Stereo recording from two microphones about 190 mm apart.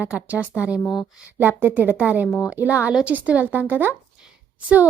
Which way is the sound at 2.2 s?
15° left (ahead or behind).